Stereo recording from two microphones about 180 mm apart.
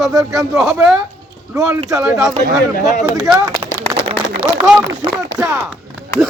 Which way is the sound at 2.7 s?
45° left (ahead or behind).